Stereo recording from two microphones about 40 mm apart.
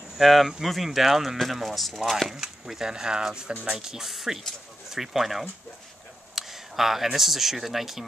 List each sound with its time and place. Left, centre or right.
0.2 s speech: centre
2.3 s speech: centre
4.1 s speech: centre